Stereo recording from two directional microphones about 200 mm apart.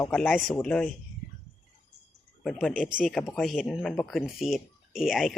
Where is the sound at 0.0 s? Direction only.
5° left (ahead or behind).